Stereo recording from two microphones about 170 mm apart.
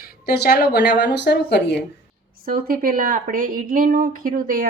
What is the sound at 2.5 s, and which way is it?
Speech, 55° right (ahead or behind).